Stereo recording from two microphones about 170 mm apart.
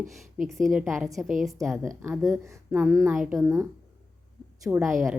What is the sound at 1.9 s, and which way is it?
A woman's voice, 15° right (ahead or behind).